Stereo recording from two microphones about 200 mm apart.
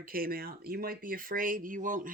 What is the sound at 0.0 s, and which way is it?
Speech, 45° right (ahead or behind).